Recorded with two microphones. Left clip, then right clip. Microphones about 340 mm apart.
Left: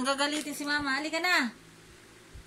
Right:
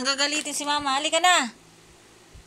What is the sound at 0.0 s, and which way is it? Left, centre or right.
Speech, centre.